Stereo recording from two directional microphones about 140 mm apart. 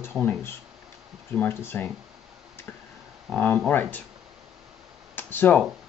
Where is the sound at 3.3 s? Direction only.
10° left (ahead or behind).